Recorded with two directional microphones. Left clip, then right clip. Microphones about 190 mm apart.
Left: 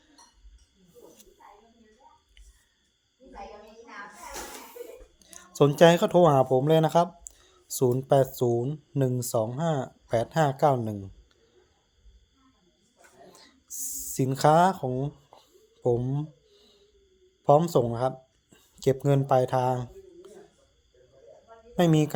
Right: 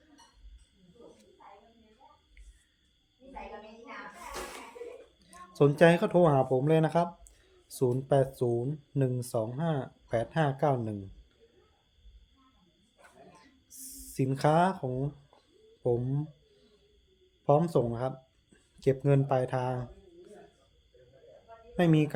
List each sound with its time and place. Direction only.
5.2 s speech: 25° left (ahead or behind)
13.3 s a sound: 25° left (ahead or behind)
15.8 s a man's voice: 20° left (ahead or behind)
17.4 s a man's voice: 25° left (ahead or behind)
21.8 s a man's voice: 20° left (ahead or behind)